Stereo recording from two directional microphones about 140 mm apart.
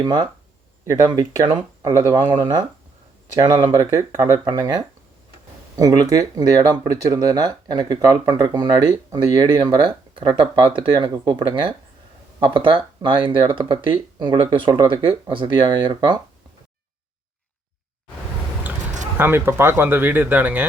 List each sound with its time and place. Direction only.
0.0 s speech: 30° right (ahead or behind)
19.1 s speech: 15° right (ahead or behind)